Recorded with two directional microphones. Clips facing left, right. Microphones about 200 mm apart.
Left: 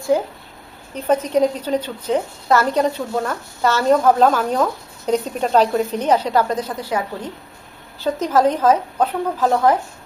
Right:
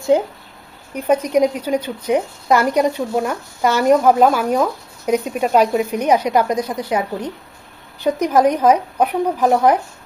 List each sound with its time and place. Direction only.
0.1 s a woman's voice: 20° right (ahead or behind)